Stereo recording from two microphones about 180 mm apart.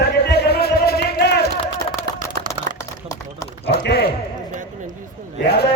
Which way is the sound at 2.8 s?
20° left (ahead or behind).